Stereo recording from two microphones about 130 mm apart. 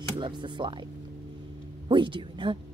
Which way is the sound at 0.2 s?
35° right (ahead or behind).